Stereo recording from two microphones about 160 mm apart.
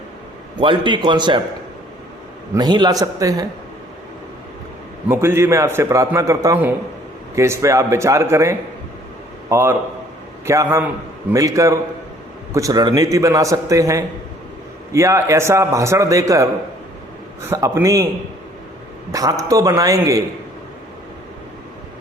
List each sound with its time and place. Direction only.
0.6 s a man's voice: 30° right (ahead or behind)
2.6 s a man's voice: 25° right (ahead or behind)
5.0 s a man's voice: 15° right (ahead or behind)
17.5 s a man's voice: 20° right (ahead or behind)
19.5 s a man's voice: 20° right (ahead or behind)